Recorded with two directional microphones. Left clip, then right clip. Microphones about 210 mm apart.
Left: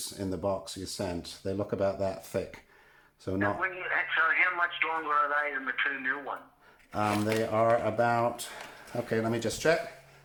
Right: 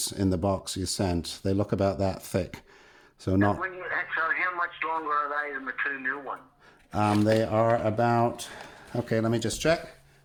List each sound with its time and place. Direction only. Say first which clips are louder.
0.0 s speech: right 5 dB; 50° right (ahead or behind)
3.6 s speech: left 1 dB; 10° left (ahead or behind)
6.9 s speech: right 5 dB; 45° right (ahead or behind)